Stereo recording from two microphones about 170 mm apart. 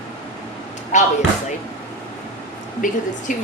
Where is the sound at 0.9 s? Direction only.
45° left (ahead or behind).